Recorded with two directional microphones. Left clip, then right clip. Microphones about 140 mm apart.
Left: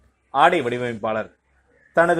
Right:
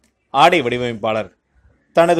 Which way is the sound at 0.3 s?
20° right (ahead or behind).